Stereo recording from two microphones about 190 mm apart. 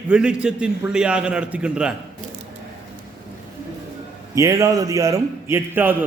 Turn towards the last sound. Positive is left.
turn(degrees=-10)  # may be behind; listen again after turning